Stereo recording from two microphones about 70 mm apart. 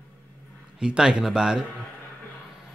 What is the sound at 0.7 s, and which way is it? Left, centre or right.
Speech, centre.